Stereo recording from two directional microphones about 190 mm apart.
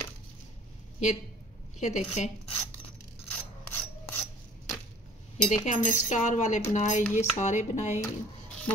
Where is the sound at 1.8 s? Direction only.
35° left (ahead or behind).